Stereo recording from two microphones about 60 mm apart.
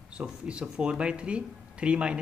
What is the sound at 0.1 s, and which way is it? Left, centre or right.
Speech, centre.